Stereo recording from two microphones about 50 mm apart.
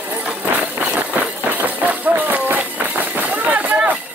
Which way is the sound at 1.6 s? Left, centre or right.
Right.